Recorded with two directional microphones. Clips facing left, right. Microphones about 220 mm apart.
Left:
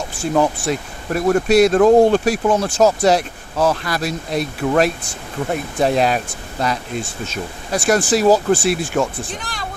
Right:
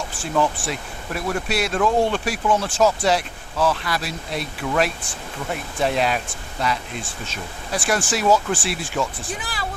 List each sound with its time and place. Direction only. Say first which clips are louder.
0.2 s speech: left 5 dB; 40° left (ahead or behind)
9.3 s speech: left 1 dB; 5° right (ahead or behind)